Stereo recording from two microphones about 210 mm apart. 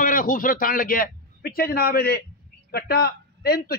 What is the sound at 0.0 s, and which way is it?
A man's voice, 40° left (ahead or behind).